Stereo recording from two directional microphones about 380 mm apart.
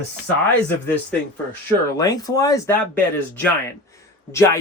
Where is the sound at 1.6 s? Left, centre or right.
Centre.